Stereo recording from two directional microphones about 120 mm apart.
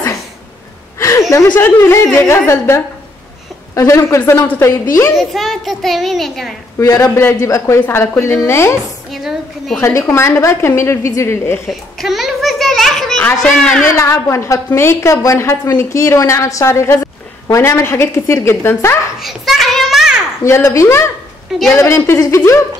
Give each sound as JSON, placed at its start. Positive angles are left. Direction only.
{"t": 0.9, "sound": "a sound", "side_deg": 25}
{"t": 1.5, "sound": "a woman's voice", "side_deg": 20}
{"t": 5.1, "sound": "a child's voice", "side_deg": 0}
{"t": 6.8, "sound": "a woman's voice", "side_deg": 30}
{"t": 9.1, "sound": "a child's voice", "side_deg": 0}
{"t": 9.8, "sound": "a woman's voice", "side_deg": 25}
{"t": 11.7, "sound": "a sound", "side_deg": 0}
{"t": 13.9, "sound": "a woman's voice", "side_deg": 25}
{"t": 19.1, "sound": "a child's voice", "side_deg": 0}
{"t": 20.4, "sound": "a woman's voice", "side_deg": 20}
{"t": 21.5, "sound": "a woman's voice", "side_deg": 0}
{"t": 21.7, "sound": "a woman's voice", "side_deg": 25}